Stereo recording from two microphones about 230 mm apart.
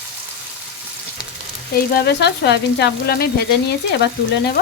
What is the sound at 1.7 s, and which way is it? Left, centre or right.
Speech, left.